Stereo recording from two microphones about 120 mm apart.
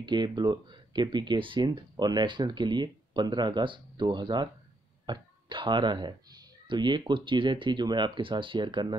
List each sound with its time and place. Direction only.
0.0 s speech: 35° right (ahead or behind)